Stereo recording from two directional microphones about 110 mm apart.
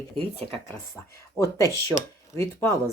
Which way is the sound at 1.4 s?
30° left (ahead or behind).